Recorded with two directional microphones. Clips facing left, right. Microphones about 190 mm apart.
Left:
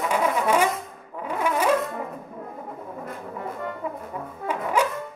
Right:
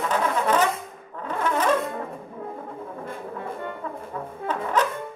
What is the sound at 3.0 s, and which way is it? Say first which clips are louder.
Brass instrument: even; 30° right (ahead or behind).